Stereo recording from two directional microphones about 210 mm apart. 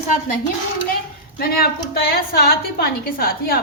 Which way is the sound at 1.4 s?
45° left (ahead or behind).